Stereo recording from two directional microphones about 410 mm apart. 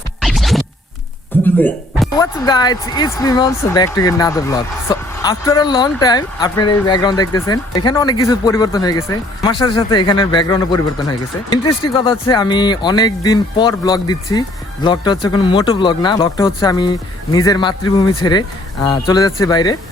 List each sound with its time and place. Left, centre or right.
0.2 s scratch: centre
1.5 s speech: centre